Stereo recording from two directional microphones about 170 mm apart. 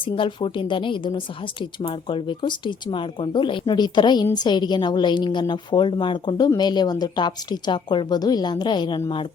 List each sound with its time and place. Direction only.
0.0 s a woman's voice: 30° left (ahead or behind)